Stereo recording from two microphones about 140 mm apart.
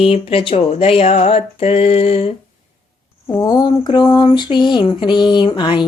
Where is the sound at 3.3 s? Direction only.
25° left (ahead or behind).